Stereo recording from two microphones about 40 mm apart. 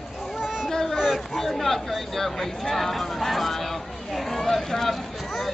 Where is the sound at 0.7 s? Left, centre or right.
Centre.